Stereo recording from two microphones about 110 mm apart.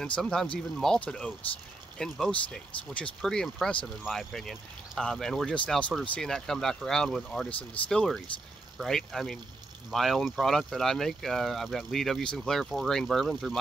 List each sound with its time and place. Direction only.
0.0 s speech: 5° left (ahead or behind)